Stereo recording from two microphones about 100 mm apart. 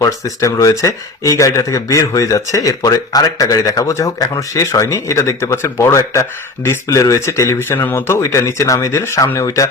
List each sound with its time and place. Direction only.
0.0 s speech: 30° left (ahead or behind)